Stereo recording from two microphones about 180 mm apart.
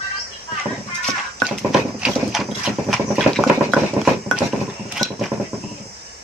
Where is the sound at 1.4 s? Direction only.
5° right (ahead or behind).